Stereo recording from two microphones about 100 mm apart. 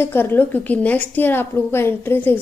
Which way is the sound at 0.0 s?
20° left (ahead or behind).